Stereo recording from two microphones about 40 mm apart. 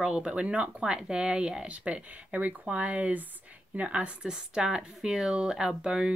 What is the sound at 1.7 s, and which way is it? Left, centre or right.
Speech, right.